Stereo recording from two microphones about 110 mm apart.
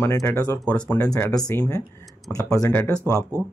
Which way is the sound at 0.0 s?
25° left (ahead or behind).